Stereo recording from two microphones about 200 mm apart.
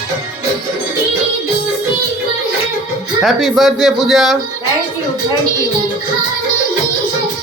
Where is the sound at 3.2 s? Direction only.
Centre (ahead or behind).